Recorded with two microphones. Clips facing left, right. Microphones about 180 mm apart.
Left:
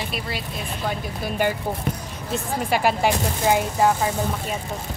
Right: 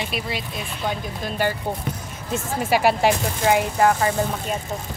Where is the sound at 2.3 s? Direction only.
5° right (ahead or behind).